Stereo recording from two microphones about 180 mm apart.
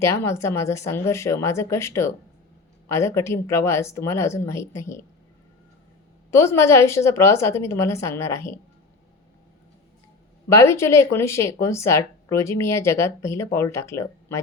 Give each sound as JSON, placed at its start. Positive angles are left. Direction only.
{"t": 0.0, "sound": "speech", "side_deg": 15}
{"t": 6.3, "sound": "speech", "side_deg": 15}
{"t": 10.5, "sound": "speech", "side_deg": 15}